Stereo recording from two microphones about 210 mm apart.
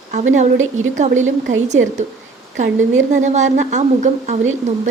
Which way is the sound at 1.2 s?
65° right (ahead or behind).